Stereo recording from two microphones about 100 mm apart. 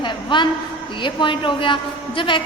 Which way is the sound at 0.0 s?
50° left (ahead or behind).